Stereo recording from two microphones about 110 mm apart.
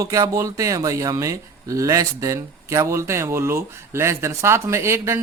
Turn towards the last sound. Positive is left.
turn(degrees=-25)  # may be behind; listen again after turning